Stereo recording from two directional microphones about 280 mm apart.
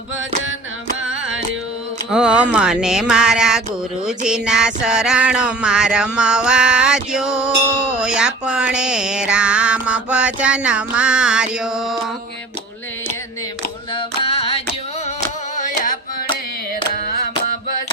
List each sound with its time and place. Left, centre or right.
1.0 s music: centre
13.9 s music: left